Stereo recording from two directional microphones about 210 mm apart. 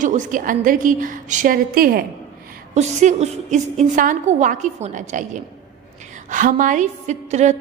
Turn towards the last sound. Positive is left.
turn(degrees=-35)  # may be behind; listen again after turning